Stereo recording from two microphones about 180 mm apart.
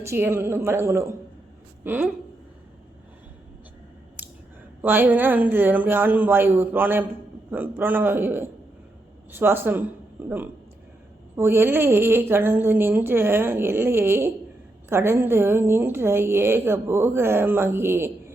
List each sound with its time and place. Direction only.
0.0 s a woman's voice: 15° right (ahead or behind)
4.8 s a woman's voice: 10° right (ahead or behind)